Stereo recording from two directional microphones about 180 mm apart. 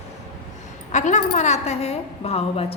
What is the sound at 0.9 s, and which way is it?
A woman's voice, 40° left (ahead or behind).